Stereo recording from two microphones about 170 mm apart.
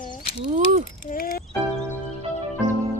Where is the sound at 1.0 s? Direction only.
55° left (ahead or behind).